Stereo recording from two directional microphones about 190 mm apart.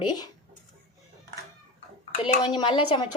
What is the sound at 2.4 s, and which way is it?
Speech, 25° left (ahead or behind).